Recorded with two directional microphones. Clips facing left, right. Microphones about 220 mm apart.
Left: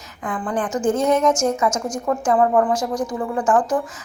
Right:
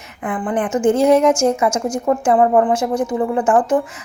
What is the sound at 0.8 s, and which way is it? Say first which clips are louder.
A woman's voice: right 5 dB; 30° right (ahead or behind).